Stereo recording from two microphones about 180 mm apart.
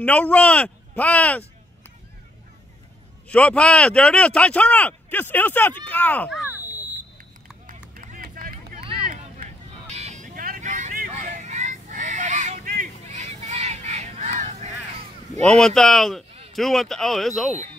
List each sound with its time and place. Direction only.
0.0 s speech: 5° left (ahead or behind)
3.3 s speech: 5° left (ahead or behind)
7.9 s vehicle: 50° right (ahead or behind)
9.8 s vehicle: 35° right (ahead or behind)
15.4 s speech: 5° left (ahead or behind)